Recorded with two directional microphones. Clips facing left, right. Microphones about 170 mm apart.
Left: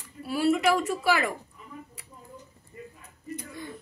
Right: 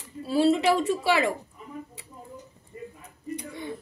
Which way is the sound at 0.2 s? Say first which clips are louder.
Right 2 dB; 30° right (ahead or behind).